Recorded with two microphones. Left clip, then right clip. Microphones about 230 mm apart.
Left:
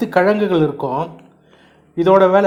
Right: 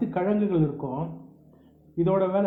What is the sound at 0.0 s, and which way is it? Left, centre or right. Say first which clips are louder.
Speech: left 12 dB; left.